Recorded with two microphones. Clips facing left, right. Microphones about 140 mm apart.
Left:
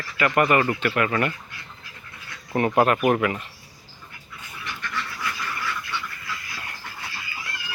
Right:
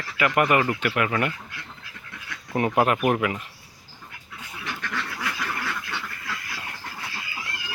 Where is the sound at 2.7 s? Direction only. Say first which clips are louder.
Left 2 dB; 5° right (ahead or behind).